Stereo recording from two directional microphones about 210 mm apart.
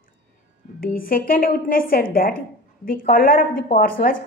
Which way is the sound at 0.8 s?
40° left (ahead or behind).